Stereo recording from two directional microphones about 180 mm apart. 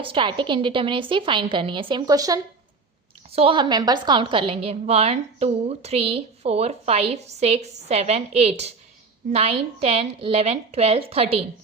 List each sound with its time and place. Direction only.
0.0 s a woman's voice: 30° right (ahead or behind)